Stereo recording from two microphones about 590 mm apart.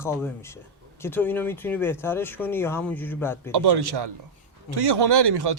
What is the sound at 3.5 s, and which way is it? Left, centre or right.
Speech, right.